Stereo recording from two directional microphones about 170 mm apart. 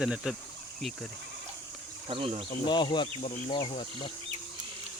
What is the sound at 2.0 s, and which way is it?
Speech, 35° right (ahead or behind).